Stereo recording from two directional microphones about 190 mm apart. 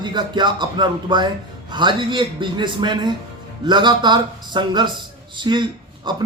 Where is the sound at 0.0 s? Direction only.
25° right (ahead or behind).